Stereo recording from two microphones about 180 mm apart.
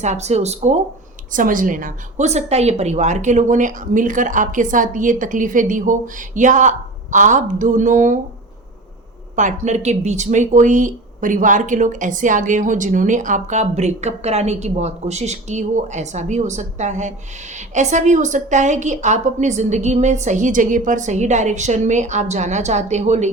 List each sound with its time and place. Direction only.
0.0 s speech: 40° right (ahead or behind)
1.3 s a woman's voice: 50° right (ahead or behind)
9.3 s speech: 45° right (ahead or behind)